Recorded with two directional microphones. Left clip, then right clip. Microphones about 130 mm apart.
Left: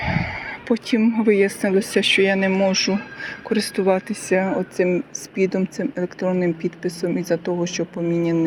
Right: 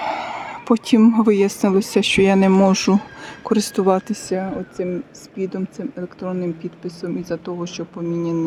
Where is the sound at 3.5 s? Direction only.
50° right (ahead or behind).